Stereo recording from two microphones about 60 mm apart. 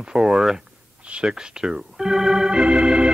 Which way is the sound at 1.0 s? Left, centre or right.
Centre.